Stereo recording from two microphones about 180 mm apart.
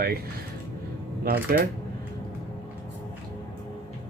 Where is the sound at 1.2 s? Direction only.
55° right (ahead or behind).